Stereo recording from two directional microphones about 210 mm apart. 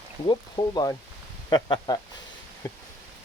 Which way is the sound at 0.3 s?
20° left (ahead or behind).